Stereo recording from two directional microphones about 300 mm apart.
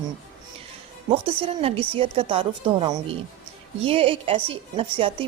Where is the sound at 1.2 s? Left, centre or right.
Centre.